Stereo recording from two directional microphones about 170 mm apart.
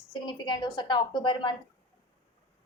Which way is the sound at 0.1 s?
25° left (ahead or behind).